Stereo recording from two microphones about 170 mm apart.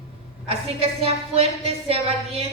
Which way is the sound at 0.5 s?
35° right (ahead or behind).